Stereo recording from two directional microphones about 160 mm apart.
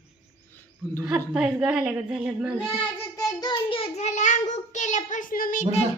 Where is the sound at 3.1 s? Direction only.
25° left (ahead or behind); by 5.8 s 45° left (ahead or behind).